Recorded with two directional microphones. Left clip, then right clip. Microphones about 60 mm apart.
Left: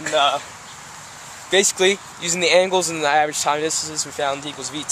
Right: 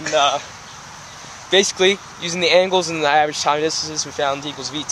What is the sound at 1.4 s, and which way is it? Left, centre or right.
Speech, centre.